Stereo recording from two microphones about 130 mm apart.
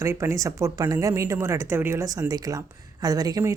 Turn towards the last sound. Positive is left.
turn(degrees=-25)  # may be behind; listen again after turning